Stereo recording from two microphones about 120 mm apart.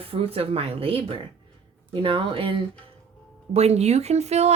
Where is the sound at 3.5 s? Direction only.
65° right (ahead or behind).